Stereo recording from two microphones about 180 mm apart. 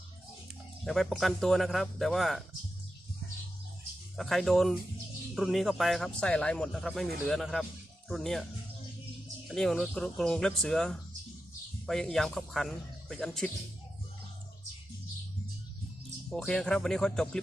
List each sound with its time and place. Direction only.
0.9 s speech: centre (ahead or behind)
4.2 s speech: centre (ahead or behind)
9.5 s speech: centre (ahead or behind)
16.3 s speech: 5° left (ahead or behind)